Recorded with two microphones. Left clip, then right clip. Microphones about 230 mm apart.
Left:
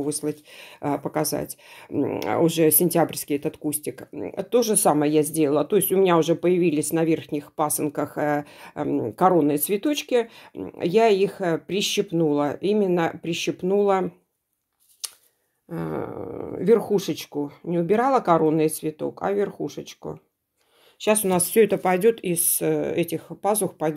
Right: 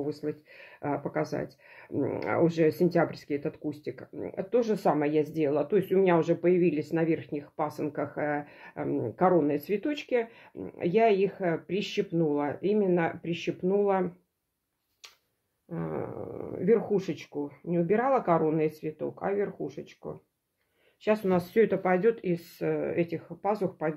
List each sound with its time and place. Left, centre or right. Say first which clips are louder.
0.2 s speech: left 6 dB; left
15.7 s speech: left 5 dB; left